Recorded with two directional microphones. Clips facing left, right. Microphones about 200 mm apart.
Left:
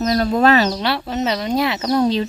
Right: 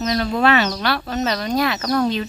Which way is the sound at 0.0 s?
40° left (ahead or behind).